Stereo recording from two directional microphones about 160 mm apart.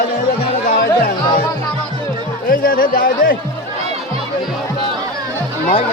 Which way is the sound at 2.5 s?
60° left (ahead or behind).